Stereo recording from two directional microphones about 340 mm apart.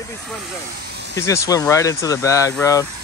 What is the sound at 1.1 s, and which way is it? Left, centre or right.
Speech, centre.